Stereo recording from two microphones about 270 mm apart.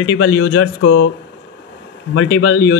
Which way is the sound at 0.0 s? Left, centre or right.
Left.